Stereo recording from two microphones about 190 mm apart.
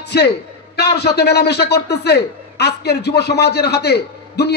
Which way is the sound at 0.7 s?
60° left (ahead or behind).